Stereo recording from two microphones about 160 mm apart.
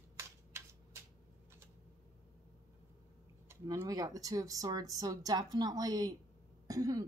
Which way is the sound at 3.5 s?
20° right (ahead or behind).